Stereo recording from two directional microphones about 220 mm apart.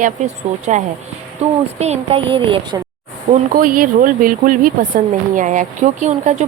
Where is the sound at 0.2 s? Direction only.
30° right (ahead or behind).